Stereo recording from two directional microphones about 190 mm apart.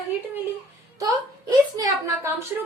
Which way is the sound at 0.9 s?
20° right (ahead or behind).